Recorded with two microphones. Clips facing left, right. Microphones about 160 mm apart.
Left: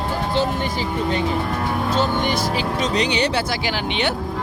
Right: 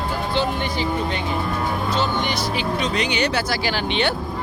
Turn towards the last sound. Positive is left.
turn(degrees=15)  # may be behind; listen again after turning